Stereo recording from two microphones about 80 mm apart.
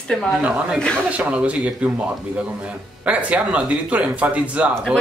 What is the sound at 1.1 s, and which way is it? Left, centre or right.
Speech, centre.